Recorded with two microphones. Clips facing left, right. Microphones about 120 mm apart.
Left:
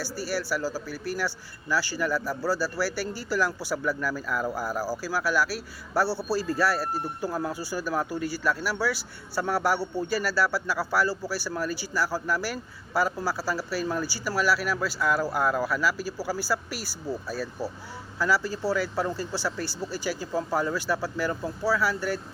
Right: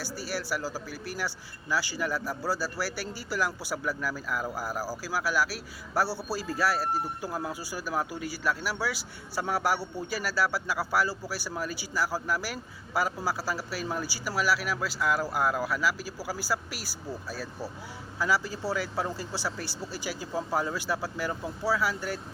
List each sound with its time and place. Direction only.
0.0 s speech: 20° right (ahead or behind)